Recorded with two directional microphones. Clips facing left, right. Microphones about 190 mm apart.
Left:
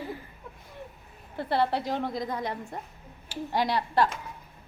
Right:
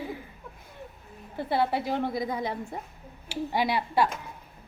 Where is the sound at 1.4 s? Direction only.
5° right (ahead or behind).